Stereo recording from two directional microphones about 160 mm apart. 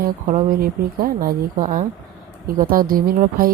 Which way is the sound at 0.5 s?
65° right (ahead or behind).